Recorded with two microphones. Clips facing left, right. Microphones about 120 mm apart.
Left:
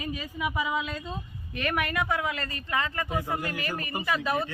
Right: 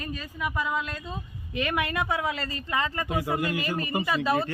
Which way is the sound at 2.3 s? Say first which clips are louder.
Right 2 dB; 30° right (ahead or behind).